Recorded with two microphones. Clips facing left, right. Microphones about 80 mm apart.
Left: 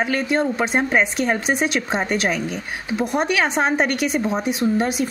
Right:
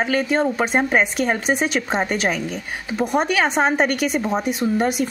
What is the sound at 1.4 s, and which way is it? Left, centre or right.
A woman's voice, centre.